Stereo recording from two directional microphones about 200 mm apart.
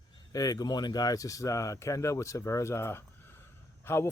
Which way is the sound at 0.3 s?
20° left (ahead or behind).